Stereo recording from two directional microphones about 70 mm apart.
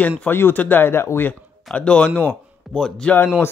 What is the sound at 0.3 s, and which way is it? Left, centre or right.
Speech, left.